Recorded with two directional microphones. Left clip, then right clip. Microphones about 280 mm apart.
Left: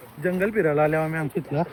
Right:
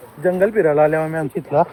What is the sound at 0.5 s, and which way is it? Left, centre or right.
Speech, right.